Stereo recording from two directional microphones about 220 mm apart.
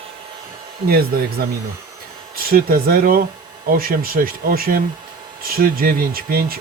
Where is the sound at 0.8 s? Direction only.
45° right (ahead or behind).